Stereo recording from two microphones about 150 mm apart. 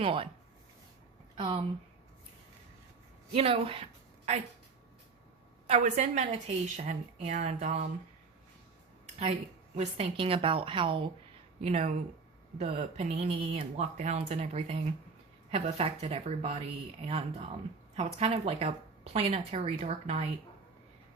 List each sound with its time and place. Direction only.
0.0 s a woman's voice: 35° right (ahead or behind)
1.4 s a woman's voice: 35° right (ahead or behind)
3.3 s a woman's voice: 40° right (ahead or behind)
5.6 s a woman's voice: 50° right (ahead or behind)
9.7 s a woman's voice: 45° right (ahead or behind)